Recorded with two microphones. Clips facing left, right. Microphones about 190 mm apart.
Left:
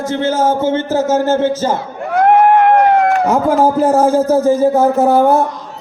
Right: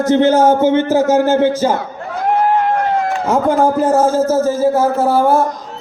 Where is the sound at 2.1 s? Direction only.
60° left (ahead or behind).